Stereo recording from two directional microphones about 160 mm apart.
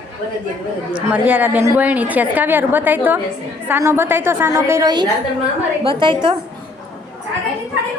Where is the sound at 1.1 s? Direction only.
10° right (ahead or behind); by 6.3 s 30° right (ahead or behind).